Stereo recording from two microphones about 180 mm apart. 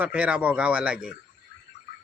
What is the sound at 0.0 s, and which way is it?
Speech, 5° right (ahead or behind).